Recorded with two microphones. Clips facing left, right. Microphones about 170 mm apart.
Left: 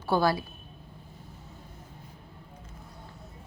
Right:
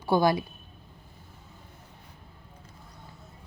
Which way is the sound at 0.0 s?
15° right (ahead or behind).